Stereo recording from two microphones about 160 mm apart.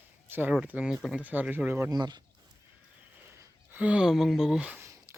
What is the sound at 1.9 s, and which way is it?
Speech, 25° right (ahead or behind).